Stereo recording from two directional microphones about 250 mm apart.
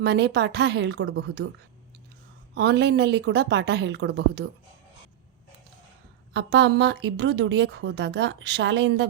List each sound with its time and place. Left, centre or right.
0.0 s a woman's voice: right
2.6 s a woman's voice: right
6.3 s a woman's voice: right